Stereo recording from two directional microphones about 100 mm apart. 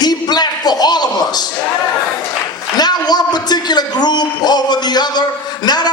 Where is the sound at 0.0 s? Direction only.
45° left (ahead or behind).